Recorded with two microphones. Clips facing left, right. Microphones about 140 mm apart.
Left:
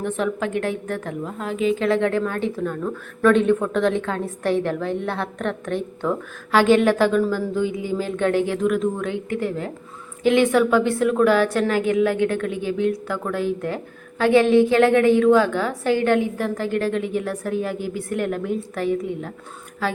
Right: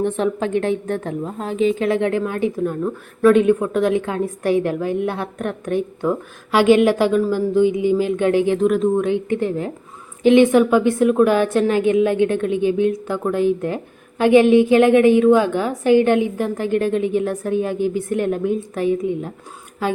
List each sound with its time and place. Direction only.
0.0 s a woman's voice: 25° right (ahead or behind)
8.6 s a woman's voice: 30° right (ahead or behind)